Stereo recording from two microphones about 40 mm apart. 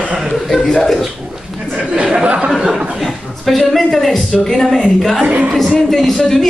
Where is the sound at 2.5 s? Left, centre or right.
Centre.